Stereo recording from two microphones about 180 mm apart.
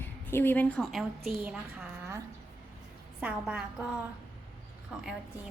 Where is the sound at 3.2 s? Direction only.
5° right (ahead or behind).